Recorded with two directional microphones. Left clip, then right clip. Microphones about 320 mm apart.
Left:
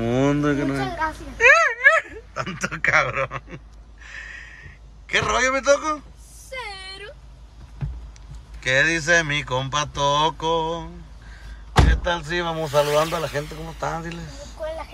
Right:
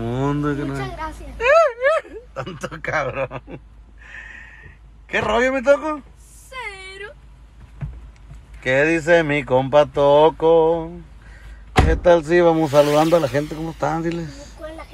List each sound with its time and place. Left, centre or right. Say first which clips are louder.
0.0 s a sound: left 2 dB; centre
5.0 s speech: right 2 dB; centre
8.5 s speech: right 2 dB; centre
11.9 s speech: right 10 dB; centre
12.8 s speech: right 5 dB; centre
14.0 s speech: right 9 dB; centre